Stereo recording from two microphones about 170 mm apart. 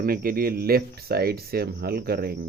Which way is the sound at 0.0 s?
60° right (ahead or behind).